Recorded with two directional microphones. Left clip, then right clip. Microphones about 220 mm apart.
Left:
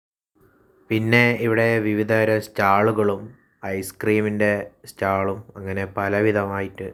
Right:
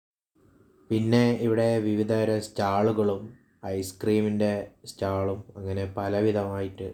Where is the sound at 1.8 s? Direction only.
25° left (ahead or behind).